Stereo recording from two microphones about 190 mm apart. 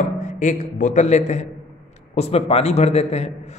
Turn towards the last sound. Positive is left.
turn(degrees=35)  # may be behind; listen again after turning